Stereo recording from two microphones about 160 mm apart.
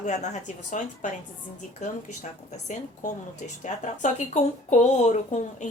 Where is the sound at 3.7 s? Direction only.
50° left (ahead or behind).